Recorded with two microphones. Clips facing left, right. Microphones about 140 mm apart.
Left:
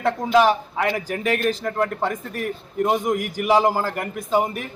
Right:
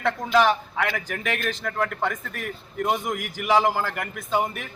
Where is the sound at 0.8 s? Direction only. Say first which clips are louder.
Left 4 dB; 30° left (ahead or behind).